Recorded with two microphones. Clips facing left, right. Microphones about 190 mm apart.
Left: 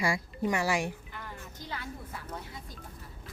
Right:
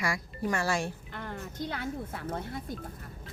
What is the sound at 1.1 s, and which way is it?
Speech, 60° right (ahead or behind).